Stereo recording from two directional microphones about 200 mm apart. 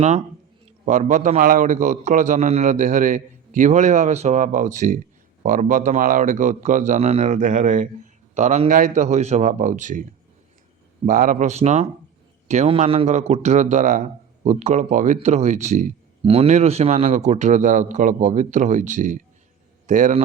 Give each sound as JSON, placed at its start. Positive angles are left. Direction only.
{"t": 0.9, "sound": "a man's voice", "side_deg": -35}